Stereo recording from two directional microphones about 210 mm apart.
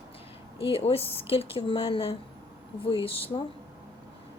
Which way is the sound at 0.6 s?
25° left (ahead or behind).